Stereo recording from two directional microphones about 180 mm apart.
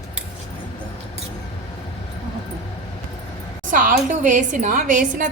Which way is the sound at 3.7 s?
50° right (ahead or behind).